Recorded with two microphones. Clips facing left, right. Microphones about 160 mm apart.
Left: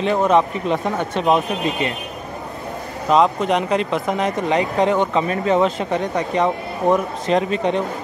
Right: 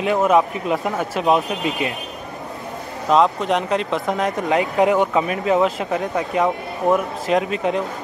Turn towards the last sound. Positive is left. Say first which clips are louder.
# left 1 dB
turn(degrees=-5)  # may be behind; listen again after turning